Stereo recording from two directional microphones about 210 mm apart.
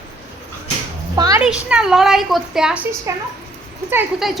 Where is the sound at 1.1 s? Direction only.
20° right (ahead or behind).